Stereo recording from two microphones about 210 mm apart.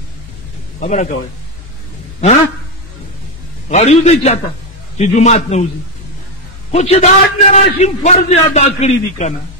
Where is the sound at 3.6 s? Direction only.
30° left (ahead or behind).